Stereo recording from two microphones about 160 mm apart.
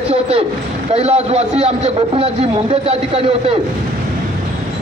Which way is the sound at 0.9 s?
40° right (ahead or behind).